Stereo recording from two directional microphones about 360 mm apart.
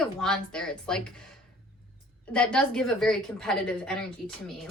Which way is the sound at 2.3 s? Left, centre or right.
Centre.